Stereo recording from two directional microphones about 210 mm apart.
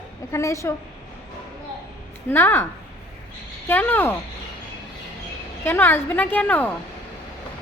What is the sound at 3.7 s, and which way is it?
Speech, 10° left (ahead or behind).